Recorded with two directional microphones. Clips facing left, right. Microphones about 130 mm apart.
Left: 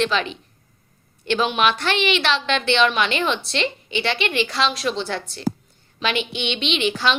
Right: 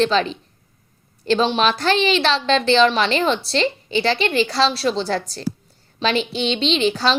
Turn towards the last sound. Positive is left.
turn(degrees=-35)  # may be behind; listen again after turning